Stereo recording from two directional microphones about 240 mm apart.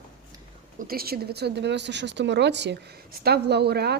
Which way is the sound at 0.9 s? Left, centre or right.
Right.